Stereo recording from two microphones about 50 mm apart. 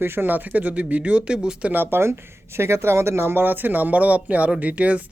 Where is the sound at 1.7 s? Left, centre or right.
Right.